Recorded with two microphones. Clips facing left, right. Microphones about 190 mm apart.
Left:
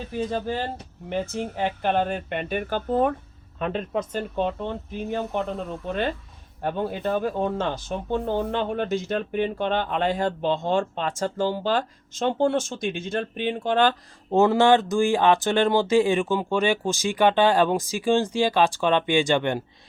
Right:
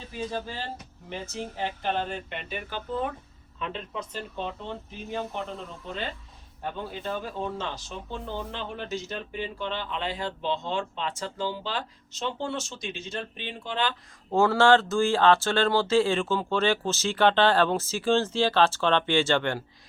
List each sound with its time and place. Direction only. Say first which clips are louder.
0.1 s speech: left 6 dB; 55° left (ahead or behind)
14.3 s speech: left 3 dB; 20° left (ahead or behind)